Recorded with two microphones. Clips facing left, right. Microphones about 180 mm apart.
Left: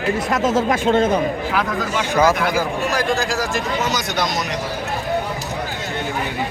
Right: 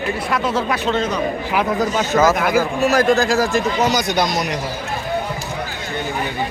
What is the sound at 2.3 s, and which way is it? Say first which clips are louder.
Speech: right 3 dB; 50° right (ahead or behind).